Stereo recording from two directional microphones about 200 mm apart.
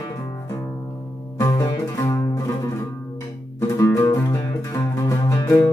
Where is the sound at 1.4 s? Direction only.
15° left (ahead or behind).